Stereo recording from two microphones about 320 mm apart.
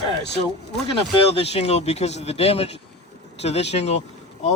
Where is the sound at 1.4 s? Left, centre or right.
Centre.